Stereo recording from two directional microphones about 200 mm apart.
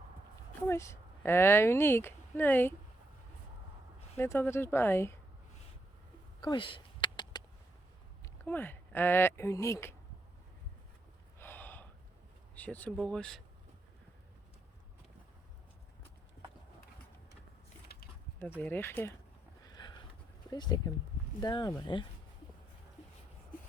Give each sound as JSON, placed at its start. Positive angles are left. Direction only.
{"t": 0.7, "sound": "speech", "side_deg": 15}
{"t": 4.2, "sound": "speech", "side_deg": 10}
{"t": 6.4, "sound": "a sound", "side_deg": 25}
{"t": 8.2, "sound": "speech", "side_deg": 10}
{"t": 11.3, "sound": "gasp", "side_deg": 10}
{"t": 12.5, "sound": "speech", "side_deg": 10}
{"t": 18.4, "sound": "speech", "side_deg": -5}
{"t": 18.7, "sound": "speech", "side_deg": 10}
{"t": 19.6, "sound": "a sound", "side_deg": 20}
{"t": 20.5, "sound": "speech", "side_deg": 20}